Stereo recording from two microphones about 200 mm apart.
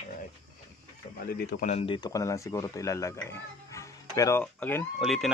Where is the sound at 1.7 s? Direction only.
30° left (ahead or behind).